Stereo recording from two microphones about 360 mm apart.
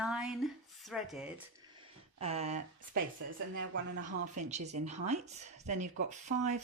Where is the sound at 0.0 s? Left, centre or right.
Centre.